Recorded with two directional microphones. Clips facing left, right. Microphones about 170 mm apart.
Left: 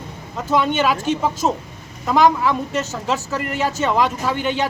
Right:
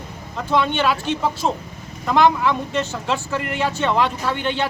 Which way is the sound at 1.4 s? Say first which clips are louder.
Left 2 dB; 5° left (ahead or behind).